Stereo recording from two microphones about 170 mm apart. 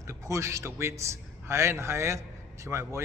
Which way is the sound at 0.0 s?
15° right (ahead or behind).